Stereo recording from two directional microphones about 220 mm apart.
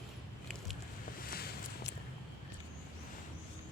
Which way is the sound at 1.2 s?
45° left (ahead or behind).